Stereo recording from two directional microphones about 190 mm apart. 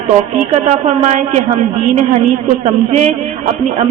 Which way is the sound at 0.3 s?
40° right (ahead or behind).